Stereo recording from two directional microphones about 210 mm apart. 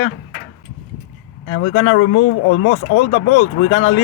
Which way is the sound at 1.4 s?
65° left (ahead or behind).